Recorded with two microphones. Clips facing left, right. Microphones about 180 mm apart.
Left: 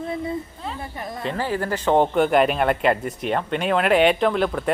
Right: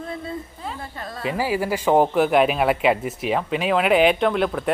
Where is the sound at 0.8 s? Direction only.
20° left (ahead or behind).